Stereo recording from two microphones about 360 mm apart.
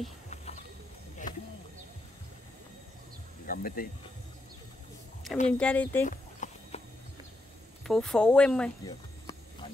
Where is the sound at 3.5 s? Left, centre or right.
Left.